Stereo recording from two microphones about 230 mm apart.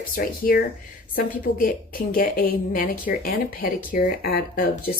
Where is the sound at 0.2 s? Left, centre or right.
Left.